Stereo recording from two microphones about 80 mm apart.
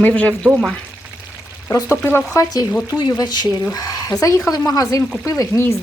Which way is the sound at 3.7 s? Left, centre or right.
Left.